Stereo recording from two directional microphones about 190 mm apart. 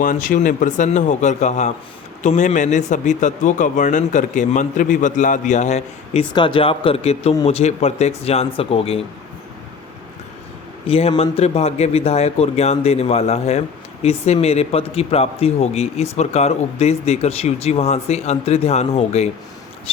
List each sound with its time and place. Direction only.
0.0 s a man's voice: 45° left (ahead or behind)
6.3 s a man's voice: 25° left (ahead or behind)
10.8 s a man's voice: 30° left (ahead or behind)